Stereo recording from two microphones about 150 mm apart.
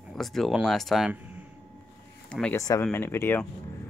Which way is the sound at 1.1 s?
10° right (ahead or behind).